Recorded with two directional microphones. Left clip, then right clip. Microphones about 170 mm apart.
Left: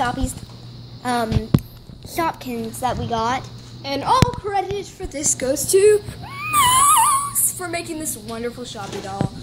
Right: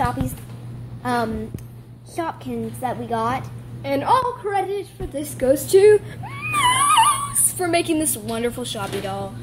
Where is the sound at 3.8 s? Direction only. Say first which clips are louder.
Even; 20° right (ahead or behind).